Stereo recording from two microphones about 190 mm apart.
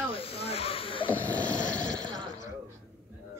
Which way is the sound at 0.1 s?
30° left (ahead or behind).